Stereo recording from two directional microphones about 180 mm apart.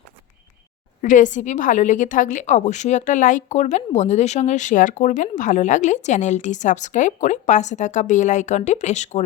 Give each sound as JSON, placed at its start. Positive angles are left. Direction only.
{"t": 1.0, "sound": "a woman's voice", "side_deg": 45}